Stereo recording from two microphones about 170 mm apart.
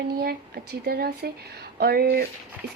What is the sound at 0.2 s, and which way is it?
A woman's voice, 65° right (ahead or behind).